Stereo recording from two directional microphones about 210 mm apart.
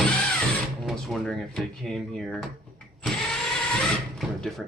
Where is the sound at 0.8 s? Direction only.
Centre (ahead or behind).